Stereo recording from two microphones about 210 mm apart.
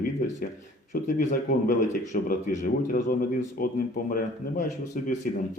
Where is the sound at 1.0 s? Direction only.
35° left (ahead or behind).